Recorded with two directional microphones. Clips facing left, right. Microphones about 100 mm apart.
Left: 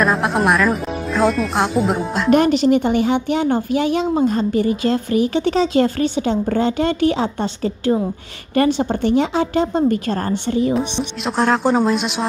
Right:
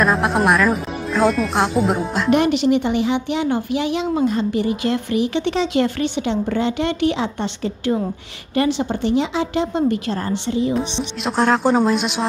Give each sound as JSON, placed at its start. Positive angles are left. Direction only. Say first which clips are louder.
{"t": 0.0, "sound": "speech", "louder": "even", "side_deg": 0}
{"t": 2.3, "sound": "a woman's voice", "louder": "left 2 dB", "side_deg": 40}
{"t": 11.2, "sound": "speech", "louder": "even", "side_deg": 0}